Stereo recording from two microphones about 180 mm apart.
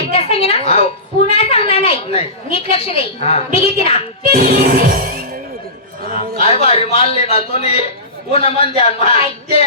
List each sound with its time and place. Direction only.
0.0 s a sound: 30° left (ahead or behind)
1.4 s a woman's voice: 30° left (ahead or behind)
4.4 s music: 50° right (ahead or behind)
6.4 s a man's voice: 35° left (ahead or behind)